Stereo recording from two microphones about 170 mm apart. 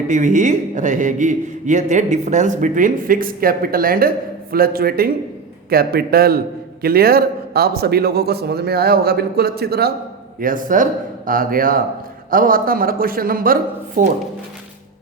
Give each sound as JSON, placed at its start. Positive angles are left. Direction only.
{"t": 0.1, "sound": "a man's voice", "side_deg": -45}
{"t": 10.4, "sound": "a man's voice", "side_deg": -55}